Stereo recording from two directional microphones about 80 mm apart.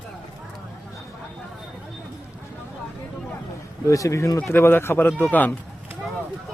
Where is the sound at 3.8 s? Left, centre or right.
Left.